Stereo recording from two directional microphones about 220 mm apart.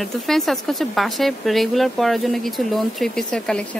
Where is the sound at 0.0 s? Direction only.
Centre (ahead or behind).